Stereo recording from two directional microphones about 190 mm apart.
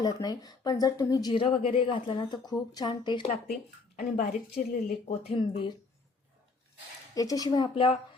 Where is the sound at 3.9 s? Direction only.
40° left (ahead or behind).